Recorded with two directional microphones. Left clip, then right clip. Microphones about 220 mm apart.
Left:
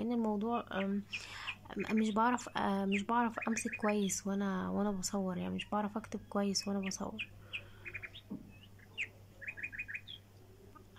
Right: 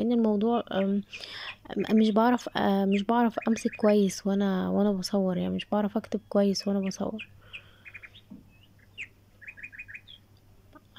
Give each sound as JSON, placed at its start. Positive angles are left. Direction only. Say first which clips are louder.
{"t": 0.0, "sound": "speech", "louder": "right 10 dB", "side_deg": -20}
{"t": 7.2, "sound": "bird", "louder": "right 1 dB", "side_deg": 0}